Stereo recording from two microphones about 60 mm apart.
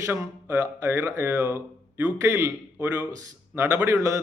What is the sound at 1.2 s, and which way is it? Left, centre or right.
Speech, right.